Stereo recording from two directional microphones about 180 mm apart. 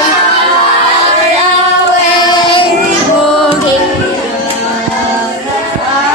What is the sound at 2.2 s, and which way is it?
Singing, 25° left (ahead or behind).